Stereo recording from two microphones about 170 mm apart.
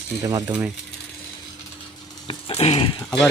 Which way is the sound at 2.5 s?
35° left (ahead or behind).